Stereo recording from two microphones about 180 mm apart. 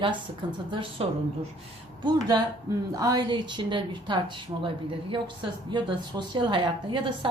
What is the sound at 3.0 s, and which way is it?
A woman's voice, 20° right (ahead or behind).